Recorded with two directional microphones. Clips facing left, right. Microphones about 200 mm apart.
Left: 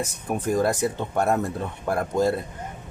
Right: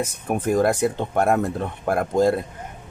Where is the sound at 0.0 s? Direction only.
55° right (ahead or behind).